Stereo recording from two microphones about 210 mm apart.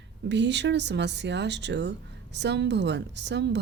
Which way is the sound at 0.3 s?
55° right (ahead or behind).